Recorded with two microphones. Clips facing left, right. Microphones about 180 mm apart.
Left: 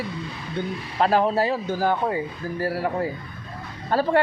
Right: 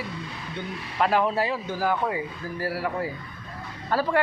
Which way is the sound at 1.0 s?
35° left (ahead or behind).